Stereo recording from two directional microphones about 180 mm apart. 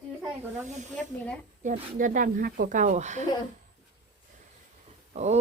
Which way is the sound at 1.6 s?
45° right (ahead or behind).